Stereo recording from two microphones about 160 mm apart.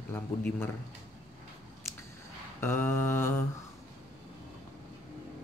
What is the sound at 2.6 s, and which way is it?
Mantra, 15° left (ahead or behind).